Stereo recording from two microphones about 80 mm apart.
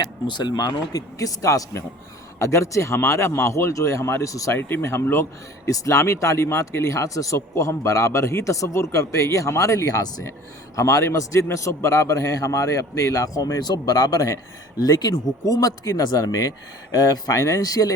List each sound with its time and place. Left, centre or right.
0.0 s speech: left
4.5 s speech: left
5.6 s speech: left